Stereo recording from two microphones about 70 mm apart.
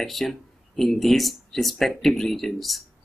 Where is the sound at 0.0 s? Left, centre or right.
Centre.